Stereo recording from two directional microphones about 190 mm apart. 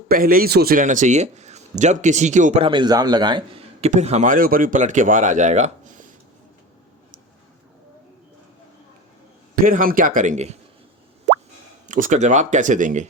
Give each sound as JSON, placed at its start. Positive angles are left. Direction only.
{"t": 0.1, "sound": "a man's voice", "side_deg": -50}
{"t": 9.6, "sound": "speech", "side_deg": -45}
{"t": 11.9, "sound": "a man's voice", "side_deg": -45}